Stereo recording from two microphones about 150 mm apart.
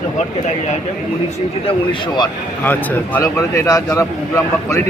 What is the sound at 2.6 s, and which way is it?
A man's voice, 10° left (ahead or behind).